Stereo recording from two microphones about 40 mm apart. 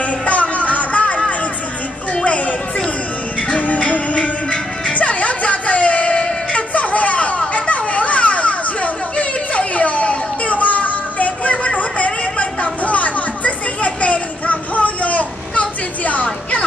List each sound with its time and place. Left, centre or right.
0.0 s music: left
2.2 s music: left
6.5 s a sound: left